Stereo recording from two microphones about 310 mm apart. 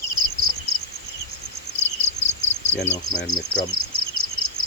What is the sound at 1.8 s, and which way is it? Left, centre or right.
Cricket, left.